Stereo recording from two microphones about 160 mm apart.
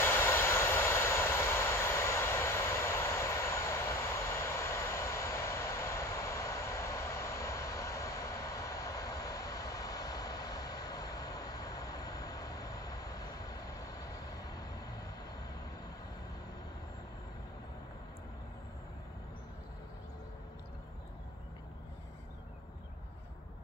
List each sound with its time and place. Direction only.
0.0 s vehicle: 15° left (ahead or behind)